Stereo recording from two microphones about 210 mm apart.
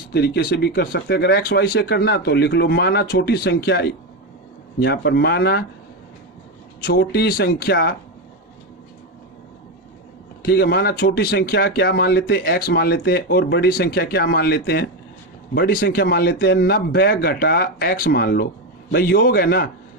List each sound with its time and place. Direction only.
0.1 s speech: 50° left (ahead or behind)
6.8 s speech: 45° left (ahead or behind)
10.4 s speech: 50° left (ahead or behind)